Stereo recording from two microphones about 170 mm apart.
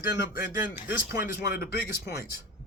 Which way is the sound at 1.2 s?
60° left (ahead or behind).